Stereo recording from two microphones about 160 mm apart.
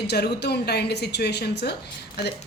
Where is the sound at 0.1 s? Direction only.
90° left.